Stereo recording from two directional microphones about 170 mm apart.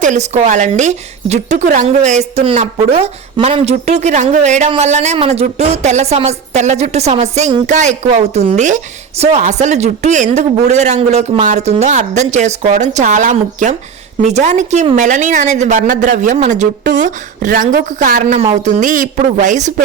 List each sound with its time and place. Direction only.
0.0 s a woman's voice: 45° right (ahead or behind)